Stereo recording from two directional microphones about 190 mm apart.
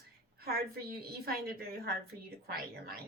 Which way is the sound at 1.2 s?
55° right (ahead or behind).